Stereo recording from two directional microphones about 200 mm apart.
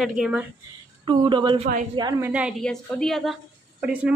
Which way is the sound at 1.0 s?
25° right (ahead or behind).